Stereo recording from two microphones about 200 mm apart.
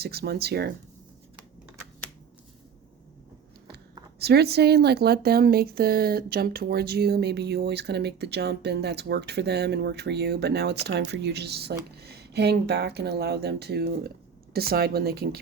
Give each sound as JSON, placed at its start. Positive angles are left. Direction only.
{"t": 0.0, "sound": "speech", "side_deg": -50}
{"t": 4.2, "sound": "speech", "side_deg": -55}